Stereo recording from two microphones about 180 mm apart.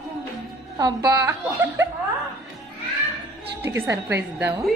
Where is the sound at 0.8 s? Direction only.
20° right (ahead or behind).